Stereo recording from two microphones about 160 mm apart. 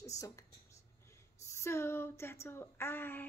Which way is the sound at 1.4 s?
20° left (ahead or behind).